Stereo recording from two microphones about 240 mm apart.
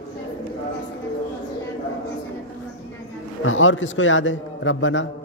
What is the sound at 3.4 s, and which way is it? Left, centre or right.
A man's voice, left.